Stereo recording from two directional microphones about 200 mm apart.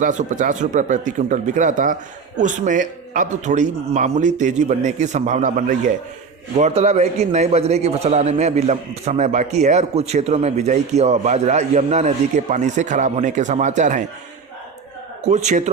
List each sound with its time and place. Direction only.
0.0 s a man's voice: 40° right (ahead or behind)
15.3 s a man's voice: 35° right (ahead or behind)